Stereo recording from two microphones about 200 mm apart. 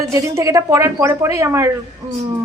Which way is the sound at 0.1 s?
15° right (ahead or behind).